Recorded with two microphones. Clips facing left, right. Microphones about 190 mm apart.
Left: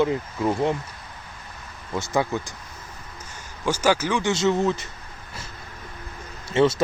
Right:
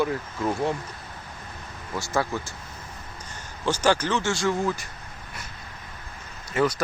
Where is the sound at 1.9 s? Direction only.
20° left (ahead or behind).